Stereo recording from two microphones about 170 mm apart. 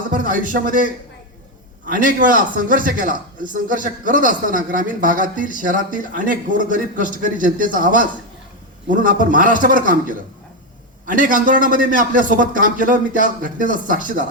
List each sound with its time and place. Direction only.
0.1 s a sound: 55° right (ahead or behind)
0.5 s speech: 55° right (ahead or behind)
1.9 s speech: 55° right (ahead or behind)